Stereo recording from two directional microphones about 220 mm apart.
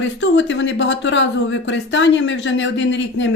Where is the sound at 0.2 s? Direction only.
55° left (ahead or behind).